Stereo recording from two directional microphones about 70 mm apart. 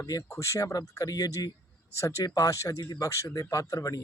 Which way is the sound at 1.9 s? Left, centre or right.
Left.